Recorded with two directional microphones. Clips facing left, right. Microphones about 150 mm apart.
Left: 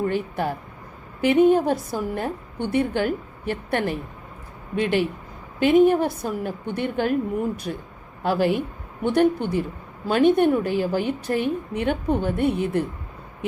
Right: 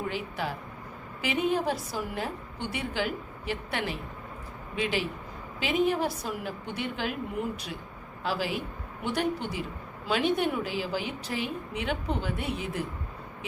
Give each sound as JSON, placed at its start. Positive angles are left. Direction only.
{"t": 0.1, "sound": "a woman's voice", "side_deg": 55}